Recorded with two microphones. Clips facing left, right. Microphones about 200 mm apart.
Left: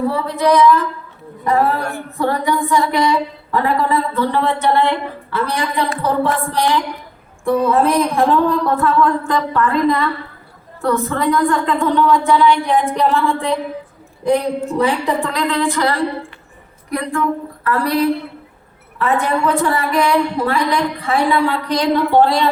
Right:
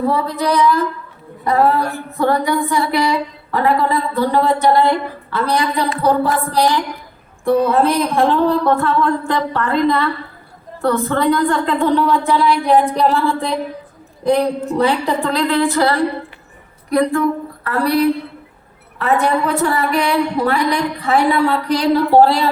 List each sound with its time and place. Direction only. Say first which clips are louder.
0.1 s a woman's voice: left 2 dB; 35° right (ahead or behind)